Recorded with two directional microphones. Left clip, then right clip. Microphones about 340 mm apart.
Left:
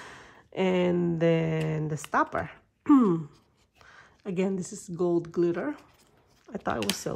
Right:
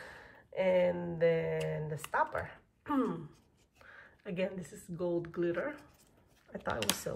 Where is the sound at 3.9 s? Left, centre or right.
Centre.